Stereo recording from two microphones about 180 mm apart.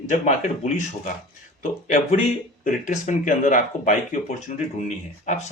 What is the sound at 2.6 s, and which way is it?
Speech, 45° left (ahead or behind).